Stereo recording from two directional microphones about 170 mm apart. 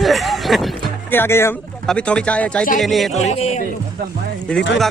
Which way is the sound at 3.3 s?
40° left (ahead or behind).